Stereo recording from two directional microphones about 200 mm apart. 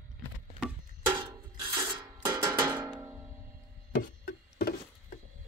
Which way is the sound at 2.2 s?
15° right (ahead or behind).